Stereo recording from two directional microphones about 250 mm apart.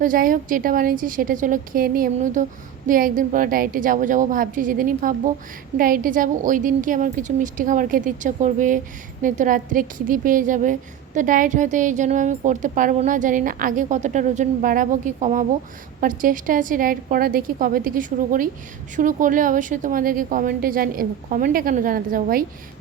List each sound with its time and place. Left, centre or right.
0.0 s a woman's voice: right